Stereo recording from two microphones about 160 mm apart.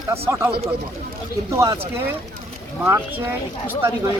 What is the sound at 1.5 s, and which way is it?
Speech, 20° right (ahead or behind).